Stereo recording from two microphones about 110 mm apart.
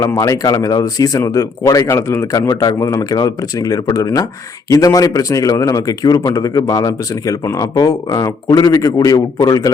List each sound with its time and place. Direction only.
0.2 s a man's voice: 30° left (ahead or behind)